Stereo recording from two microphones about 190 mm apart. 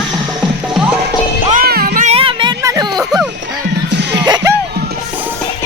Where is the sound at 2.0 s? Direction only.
30° right (ahead or behind).